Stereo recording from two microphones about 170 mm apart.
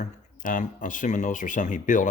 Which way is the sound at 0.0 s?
45° left (ahead or behind).